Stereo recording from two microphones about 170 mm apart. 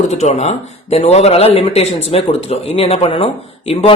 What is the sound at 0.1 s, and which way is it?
Speech, 40° left (ahead or behind).